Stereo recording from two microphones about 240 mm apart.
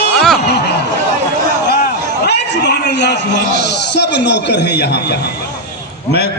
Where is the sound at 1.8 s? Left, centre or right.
Left.